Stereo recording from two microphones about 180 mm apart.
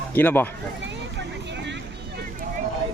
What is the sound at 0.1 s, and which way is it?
Speech, 10° left (ahead or behind).